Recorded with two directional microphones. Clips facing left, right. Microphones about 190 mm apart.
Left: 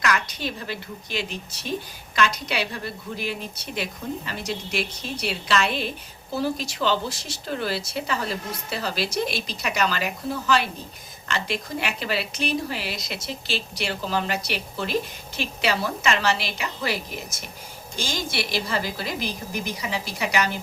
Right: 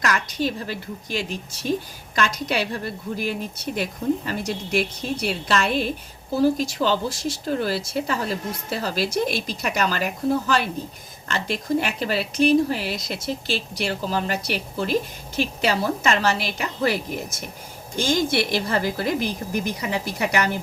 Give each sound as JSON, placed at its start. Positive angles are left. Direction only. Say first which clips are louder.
{"t": 0.0, "sound": "a woman's voice", "louder": "right 2 dB", "side_deg": -45}